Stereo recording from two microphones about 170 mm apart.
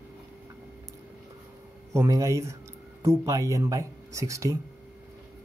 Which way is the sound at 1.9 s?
20° right (ahead or behind).